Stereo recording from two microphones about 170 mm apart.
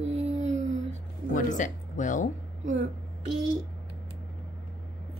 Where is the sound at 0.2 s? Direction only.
45° right (ahead or behind).